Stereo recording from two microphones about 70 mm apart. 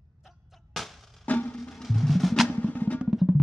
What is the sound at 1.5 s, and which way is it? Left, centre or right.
Music, centre.